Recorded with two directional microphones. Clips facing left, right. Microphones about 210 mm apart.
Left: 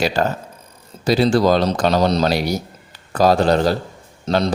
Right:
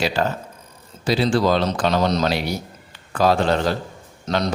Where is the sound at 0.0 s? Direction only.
45° left (ahead or behind).